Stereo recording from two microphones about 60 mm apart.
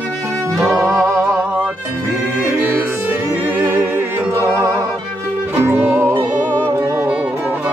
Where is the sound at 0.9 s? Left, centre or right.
Right.